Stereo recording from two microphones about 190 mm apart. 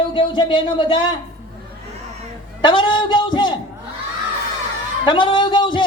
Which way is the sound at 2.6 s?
25° left (ahead or behind).